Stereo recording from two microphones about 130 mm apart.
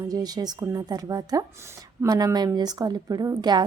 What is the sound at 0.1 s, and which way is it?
Speech, 30° right (ahead or behind).